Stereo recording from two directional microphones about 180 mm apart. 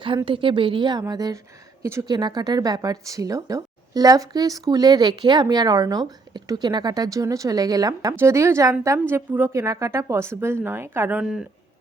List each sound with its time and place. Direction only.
0.3 s a woman's voice: 30° right (ahead or behind); by 11.4 s 5° right (ahead or behind)